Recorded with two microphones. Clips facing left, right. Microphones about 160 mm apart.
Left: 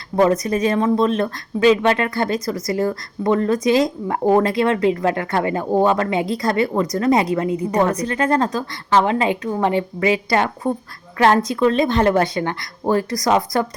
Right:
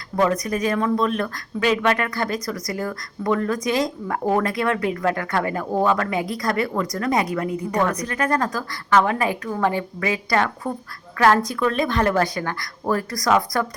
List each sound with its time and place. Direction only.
0.2 s speech: 25° left (ahead or behind)